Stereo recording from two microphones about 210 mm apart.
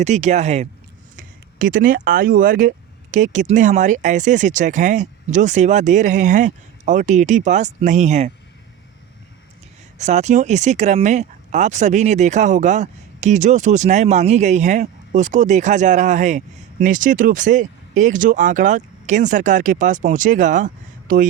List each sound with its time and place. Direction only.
0.0 s speech: 35° right (ahead or behind)
10.0 s speech: 35° right (ahead or behind)